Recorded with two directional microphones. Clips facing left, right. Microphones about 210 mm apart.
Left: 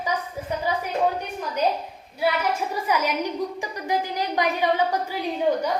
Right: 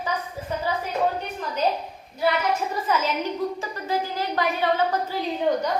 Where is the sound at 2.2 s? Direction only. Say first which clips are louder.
Right 1 dB; 10° left (ahead or behind).